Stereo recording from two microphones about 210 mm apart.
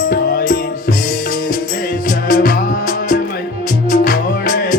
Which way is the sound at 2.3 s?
40° left (ahead or behind).